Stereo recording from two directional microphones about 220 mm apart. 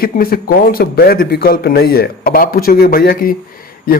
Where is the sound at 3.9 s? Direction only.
40° left (ahead or behind).